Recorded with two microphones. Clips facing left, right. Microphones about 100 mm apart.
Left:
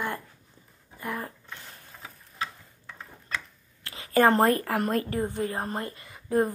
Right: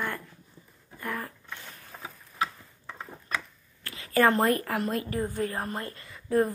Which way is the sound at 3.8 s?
25° left (ahead or behind).